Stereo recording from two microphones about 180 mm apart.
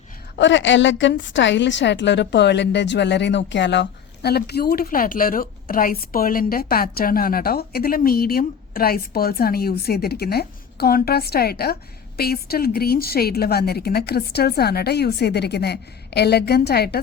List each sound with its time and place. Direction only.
0.3 s a woman's voice: 90° left; by 17.0 s 60° left (ahead or behind)